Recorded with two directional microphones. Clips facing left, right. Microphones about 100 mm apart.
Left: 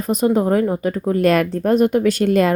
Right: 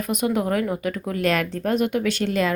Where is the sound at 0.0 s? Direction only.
35° left (ahead or behind).